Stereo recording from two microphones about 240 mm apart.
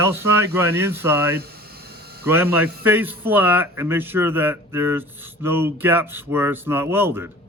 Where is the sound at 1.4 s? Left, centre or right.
Right.